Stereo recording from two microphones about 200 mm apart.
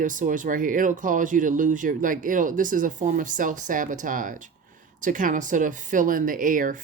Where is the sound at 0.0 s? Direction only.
40° right (ahead or behind).